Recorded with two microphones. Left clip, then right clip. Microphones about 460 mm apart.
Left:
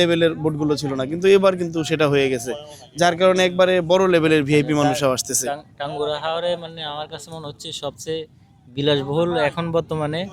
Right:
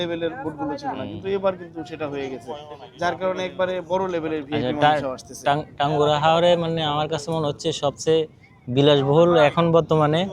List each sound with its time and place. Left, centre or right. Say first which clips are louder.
0.0 s a man's voice: left 8 dB; left
5.5 s speech: right 6 dB; centre